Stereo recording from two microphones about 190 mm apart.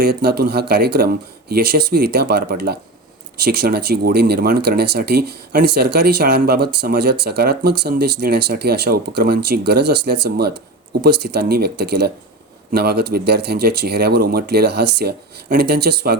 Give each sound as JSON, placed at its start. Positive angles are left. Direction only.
{"t": 0.0, "sound": "speech", "side_deg": -55}